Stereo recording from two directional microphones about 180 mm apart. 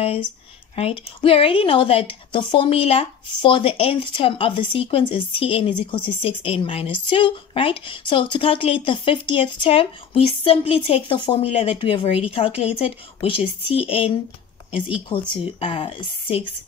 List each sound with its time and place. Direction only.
0.7 s speech: 30° left (ahead or behind)